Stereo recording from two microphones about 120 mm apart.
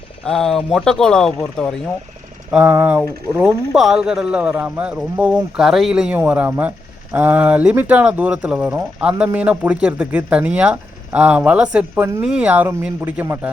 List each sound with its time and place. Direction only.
0.3 s speech: 5° left (ahead or behind)
2.5 s speech: 10° right (ahead or behind)